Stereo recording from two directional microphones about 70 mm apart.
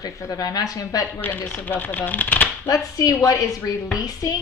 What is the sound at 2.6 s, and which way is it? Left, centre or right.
A woman's voice, left.